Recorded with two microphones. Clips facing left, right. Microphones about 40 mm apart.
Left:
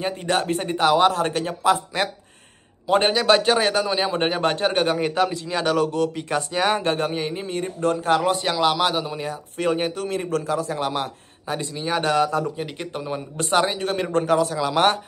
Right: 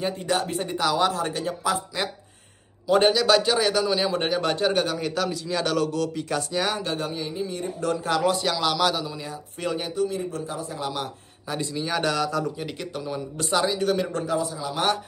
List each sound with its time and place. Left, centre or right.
0.0 s a man's voice: left
5.6 s a man's voice: centre
5.9 s a man's voice: left
8.3 s speech: left
9.1 s a man's voice: left
10.0 s a man's voice: left
10.8 s a man's voice: left
11.5 s a man's voice: left